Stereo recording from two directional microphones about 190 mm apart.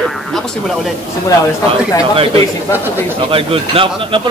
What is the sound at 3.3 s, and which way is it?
Speech, 30° right (ahead or behind).